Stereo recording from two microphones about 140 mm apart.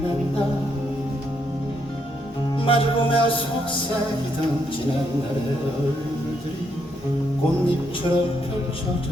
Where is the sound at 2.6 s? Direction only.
40° left (ahead or behind).